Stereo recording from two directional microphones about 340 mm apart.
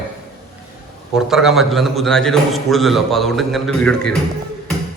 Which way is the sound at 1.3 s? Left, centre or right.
Centre.